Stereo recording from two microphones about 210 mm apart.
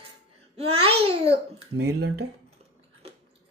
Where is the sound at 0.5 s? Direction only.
25° right (ahead or behind).